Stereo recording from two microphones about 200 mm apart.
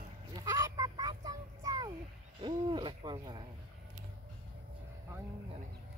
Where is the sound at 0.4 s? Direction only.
15° right (ahead or behind).